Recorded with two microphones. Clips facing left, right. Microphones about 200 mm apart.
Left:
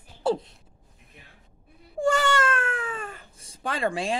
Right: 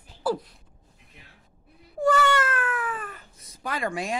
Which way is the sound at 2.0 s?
30° left (ahead or behind).